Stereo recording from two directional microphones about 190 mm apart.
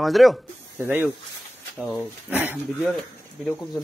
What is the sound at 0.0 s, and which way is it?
Speech, centre (ahead or behind).